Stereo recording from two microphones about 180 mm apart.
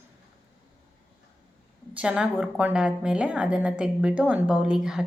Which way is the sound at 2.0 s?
5° right (ahead or behind).